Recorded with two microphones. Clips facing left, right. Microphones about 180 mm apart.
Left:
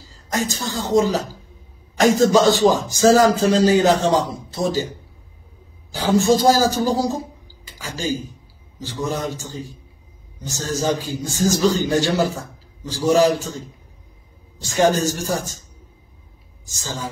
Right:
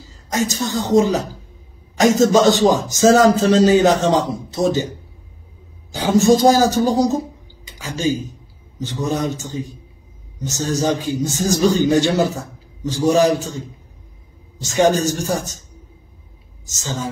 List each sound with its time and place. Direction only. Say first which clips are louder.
0.3 s speech: right 4 dB; 20° right (ahead or behind)
5.9 s a man's voice: right 3 dB; 20° right (ahead or behind)
14.6 s a man's voice: right 2 dB; 20° right (ahead or behind)
16.6 s speech: right 3 dB; 20° right (ahead or behind)